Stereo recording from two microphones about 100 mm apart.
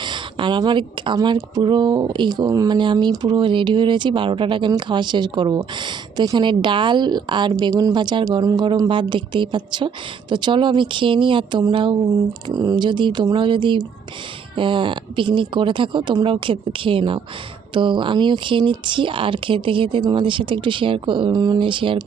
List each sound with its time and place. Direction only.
0.0 s a woman's voice: 50° right (ahead or behind)
7.7 s a woman's voice: 40° right (ahead or behind); by 11.9 s 55° right (ahead or behind)
12.5 s a woman's voice: 45° right (ahead or behind)